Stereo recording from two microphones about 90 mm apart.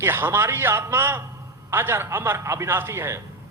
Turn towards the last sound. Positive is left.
turn(degrees=-30)  # may be behind; listen again after turning